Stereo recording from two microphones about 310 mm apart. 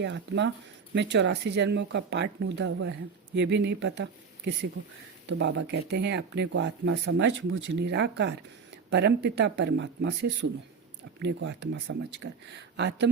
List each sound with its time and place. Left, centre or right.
0.0 s speech: right